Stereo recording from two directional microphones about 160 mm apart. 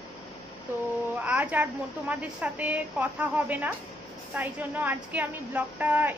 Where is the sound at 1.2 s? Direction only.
10° right (ahead or behind).